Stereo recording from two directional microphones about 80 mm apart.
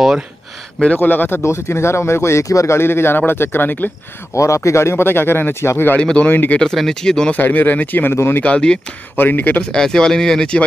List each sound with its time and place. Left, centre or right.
0.9 s speech: left
4.4 s speech: left
5.9 s speech: centre
6.6 s speech: centre
7.3 s speech: left
8.4 s speech: centre
9.1 s speech: left
9.7 s speech: centre